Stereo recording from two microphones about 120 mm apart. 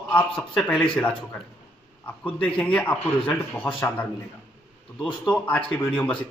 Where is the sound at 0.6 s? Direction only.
10° left (ahead or behind).